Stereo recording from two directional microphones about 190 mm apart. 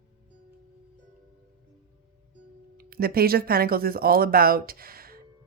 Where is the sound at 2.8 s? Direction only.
55° right (ahead or behind).